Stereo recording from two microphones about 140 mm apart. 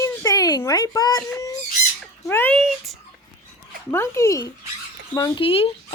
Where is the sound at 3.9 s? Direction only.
20° left (ahead or behind).